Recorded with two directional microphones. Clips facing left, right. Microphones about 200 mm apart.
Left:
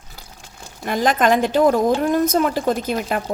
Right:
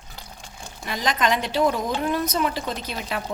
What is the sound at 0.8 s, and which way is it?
A woman's voice, 50° left (ahead or behind).